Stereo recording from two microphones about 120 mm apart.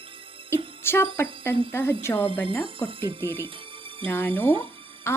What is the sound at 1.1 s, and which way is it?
Speech, 20° left (ahead or behind).